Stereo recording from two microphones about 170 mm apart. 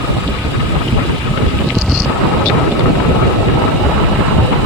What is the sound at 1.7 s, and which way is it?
Vehicle, centre (ahead or behind).